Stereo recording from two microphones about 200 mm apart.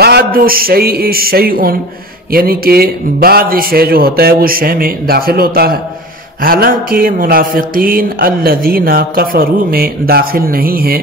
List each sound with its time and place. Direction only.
0.0 s speech: 50° right (ahead or behind)